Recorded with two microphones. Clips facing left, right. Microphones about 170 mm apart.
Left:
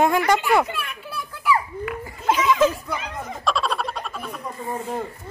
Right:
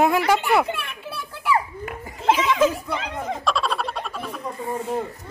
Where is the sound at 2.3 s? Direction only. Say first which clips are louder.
Even; 5° right (ahead or behind).